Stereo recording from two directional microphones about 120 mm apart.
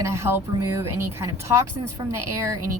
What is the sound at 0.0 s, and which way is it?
A woman's voice, 25° right (ahead or behind).